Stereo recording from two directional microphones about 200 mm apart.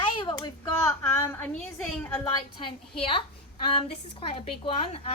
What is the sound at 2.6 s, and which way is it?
A woman's voice, 25° left (ahead or behind).